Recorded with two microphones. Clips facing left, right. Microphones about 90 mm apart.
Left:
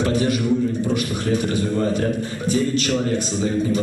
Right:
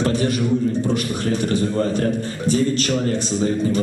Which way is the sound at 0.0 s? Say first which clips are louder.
Even; 40° right (ahead or behind).